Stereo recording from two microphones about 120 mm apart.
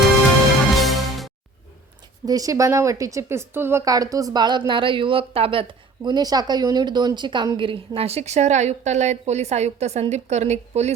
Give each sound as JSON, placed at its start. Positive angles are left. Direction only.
{"t": 0.7, "sound": "music", "side_deg": 0}
{"t": 2.2, "sound": "a woman's voice", "side_deg": -30}